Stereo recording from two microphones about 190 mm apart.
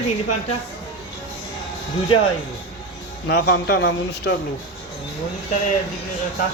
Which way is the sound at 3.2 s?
55° left (ahead or behind).